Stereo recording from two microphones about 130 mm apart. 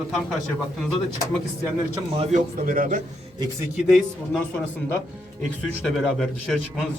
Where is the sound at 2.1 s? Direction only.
50° right (ahead or behind).